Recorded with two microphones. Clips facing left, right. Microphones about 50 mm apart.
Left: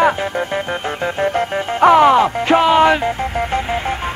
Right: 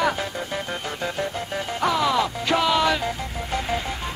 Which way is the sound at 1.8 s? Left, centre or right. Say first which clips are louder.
Left 12 dB; left.